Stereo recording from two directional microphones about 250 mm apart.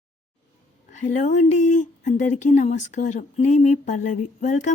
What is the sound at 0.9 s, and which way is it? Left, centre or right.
Speech, left.